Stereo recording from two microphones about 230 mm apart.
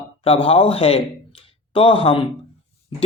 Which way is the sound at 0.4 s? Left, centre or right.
Left.